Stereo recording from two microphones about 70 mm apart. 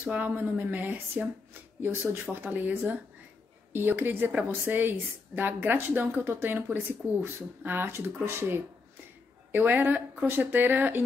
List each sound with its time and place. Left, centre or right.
0.0 s a woman's voice: right